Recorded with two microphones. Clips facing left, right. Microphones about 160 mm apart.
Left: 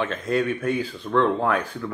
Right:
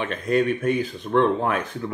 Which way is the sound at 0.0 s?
15° right (ahead or behind).